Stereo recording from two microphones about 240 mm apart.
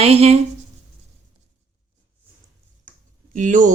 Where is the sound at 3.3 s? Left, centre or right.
Right.